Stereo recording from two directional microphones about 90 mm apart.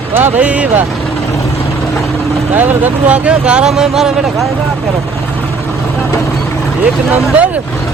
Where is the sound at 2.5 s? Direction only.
20° right (ahead or behind); by 4.5 s 5° right (ahead or behind).